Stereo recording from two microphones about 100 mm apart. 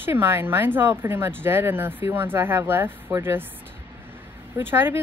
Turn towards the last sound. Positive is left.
turn(degrees=-20)  # may be behind; listen again after turning